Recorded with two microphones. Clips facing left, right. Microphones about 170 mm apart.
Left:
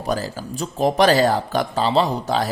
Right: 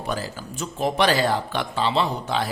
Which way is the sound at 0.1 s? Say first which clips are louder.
Left 6 dB; 40° left (ahead or behind).